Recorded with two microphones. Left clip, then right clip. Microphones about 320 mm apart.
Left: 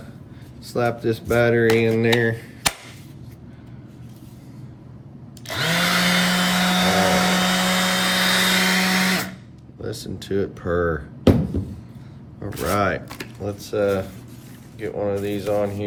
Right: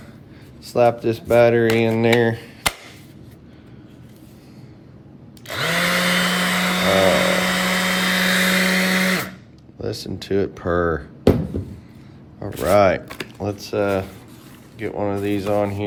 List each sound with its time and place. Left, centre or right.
0.6 s speech: centre
5.5 s vacuum cleaner: centre
9.8 s speech: centre
12.6 s speech: centre